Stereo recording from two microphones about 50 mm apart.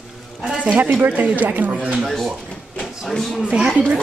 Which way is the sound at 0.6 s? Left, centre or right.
Right.